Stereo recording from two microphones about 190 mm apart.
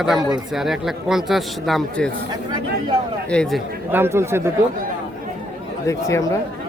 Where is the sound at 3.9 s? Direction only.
10° right (ahead or behind).